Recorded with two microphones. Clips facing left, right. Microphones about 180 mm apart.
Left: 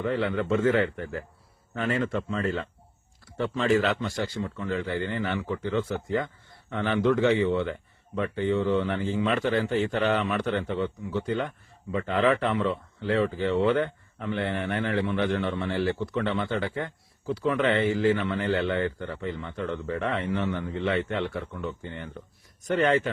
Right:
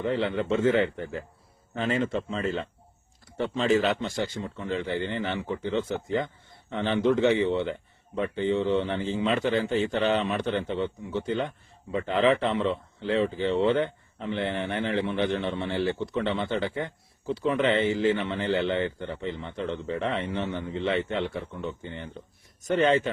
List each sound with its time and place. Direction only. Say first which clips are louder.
0.0 s speech: even; 25° right (ahead or behind)